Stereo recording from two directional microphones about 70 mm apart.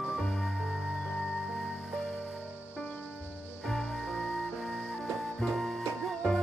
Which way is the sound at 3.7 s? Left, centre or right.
Centre.